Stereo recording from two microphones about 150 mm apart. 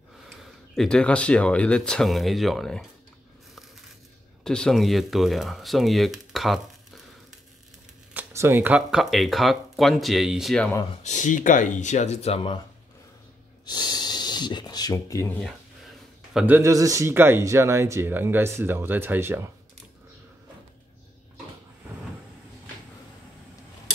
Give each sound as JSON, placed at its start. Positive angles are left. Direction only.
{"t": 0.4, "sound": "speech", "side_deg": 5}
{"t": 4.5, "sound": "speech", "side_deg": 5}
{"t": 8.1, "sound": "speech", "side_deg": -15}
{"t": 11.1, "sound": "speech", "side_deg": 55}
{"t": 13.7, "sound": "snort", "side_deg": 30}
{"t": 16.3, "sound": "speech", "side_deg": -15}